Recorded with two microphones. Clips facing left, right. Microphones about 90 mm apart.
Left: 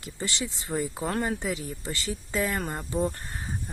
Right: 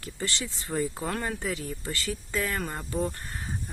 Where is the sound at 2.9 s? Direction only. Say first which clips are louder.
Left 3 dB; 20° left (ahead or behind).